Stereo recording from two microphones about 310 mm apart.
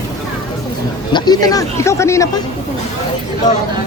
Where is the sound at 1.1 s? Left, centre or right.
Centre.